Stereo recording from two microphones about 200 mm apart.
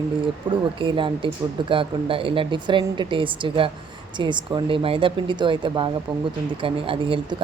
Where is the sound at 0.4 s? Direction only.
25° right (ahead or behind).